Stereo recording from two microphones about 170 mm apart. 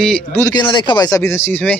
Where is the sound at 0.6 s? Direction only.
30° left (ahead or behind); by 1.8 s 10° left (ahead or behind).